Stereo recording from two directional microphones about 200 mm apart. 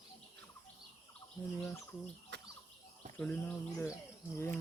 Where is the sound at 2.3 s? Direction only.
60° right (ahead or behind).